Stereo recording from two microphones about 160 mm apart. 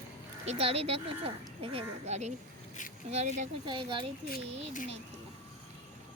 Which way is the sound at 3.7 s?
30° right (ahead or behind).